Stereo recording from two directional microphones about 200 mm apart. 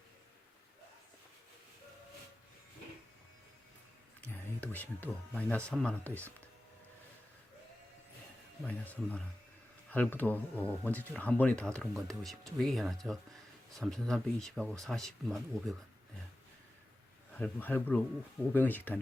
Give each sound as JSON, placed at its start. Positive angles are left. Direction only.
{"t": 4.2, "sound": "music", "side_deg": 10}
{"t": 5.7, "sound": "speech", "side_deg": 5}
{"t": 8.6, "sound": "speech", "side_deg": 5}
{"t": 17.3, "sound": "speech", "side_deg": 10}